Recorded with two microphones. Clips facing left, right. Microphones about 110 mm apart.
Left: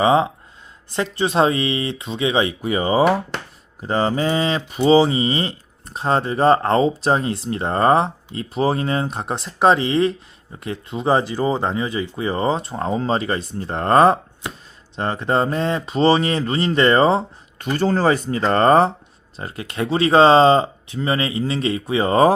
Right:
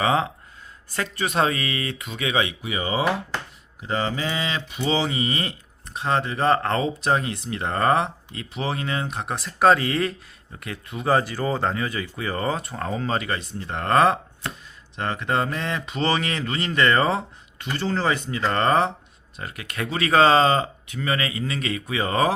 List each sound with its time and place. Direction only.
0.0 s speech: 25° left (ahead or behind)
14.4 s speech: 15° left (ahead or behind)
14.9 s speech: 30° left (ahead or behind)
17.6 s speech: 45° left (ahead or behind)